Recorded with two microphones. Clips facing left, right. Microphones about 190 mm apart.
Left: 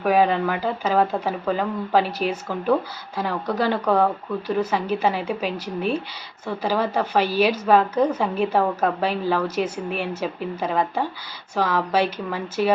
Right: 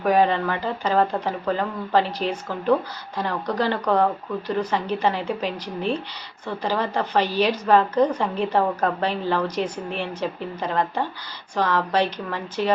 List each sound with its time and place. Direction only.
0.0 s speech: 5° left (ahead or behind)